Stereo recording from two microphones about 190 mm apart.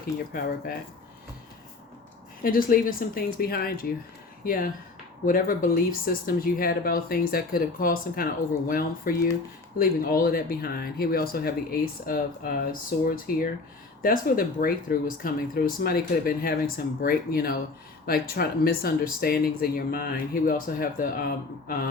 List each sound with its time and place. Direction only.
0.3 s speech: 50° left (ahead or behind)
2.4 s speech: 50° left (ahead or behind)